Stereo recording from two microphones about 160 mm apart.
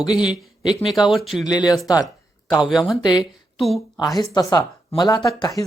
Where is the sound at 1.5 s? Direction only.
25° left (ahead or behind).